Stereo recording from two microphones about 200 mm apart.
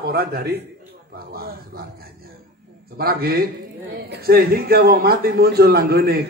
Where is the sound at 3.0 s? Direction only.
50° right (ahead or behind).